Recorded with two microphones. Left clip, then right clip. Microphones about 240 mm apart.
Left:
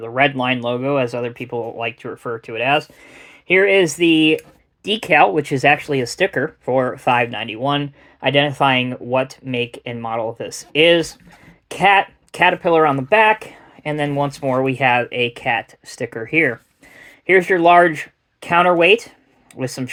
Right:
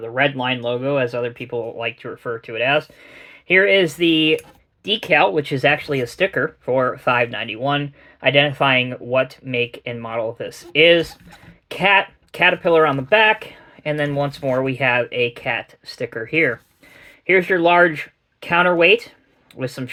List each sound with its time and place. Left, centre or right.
0.0 s speech: left